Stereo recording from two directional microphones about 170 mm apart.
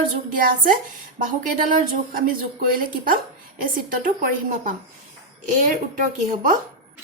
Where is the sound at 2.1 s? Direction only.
55° right (ahead or behind).